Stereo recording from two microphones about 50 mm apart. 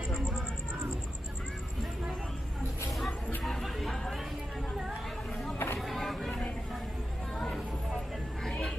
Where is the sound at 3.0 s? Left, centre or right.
Centre.